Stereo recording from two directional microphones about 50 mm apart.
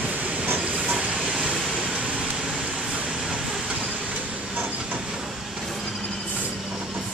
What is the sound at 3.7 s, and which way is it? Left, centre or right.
Train, right.